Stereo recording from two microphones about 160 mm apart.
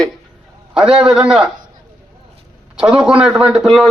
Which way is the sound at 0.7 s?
5° right (ahead or behind).